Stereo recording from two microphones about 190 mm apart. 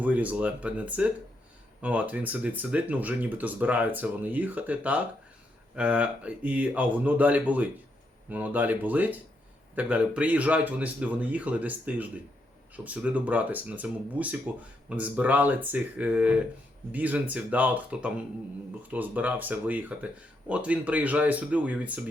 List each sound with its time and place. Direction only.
0.0 s speech: 10° right (ahead or behind)